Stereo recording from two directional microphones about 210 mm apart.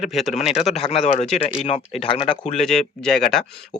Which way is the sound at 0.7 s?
30° left (ahead or behind).